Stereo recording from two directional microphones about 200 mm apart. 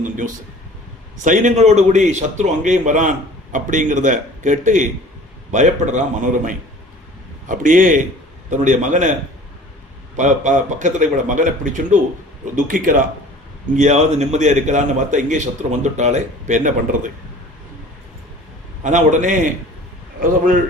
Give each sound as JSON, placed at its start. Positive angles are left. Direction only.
{"t": 1.2, "sound": "a man's voice", "side_deg": -40}
{"t": 10.2, "sound": "a man's voice", "side_deg": -35}
{"t": 18.8, "sound": "a man's voice", "side_deg": -35}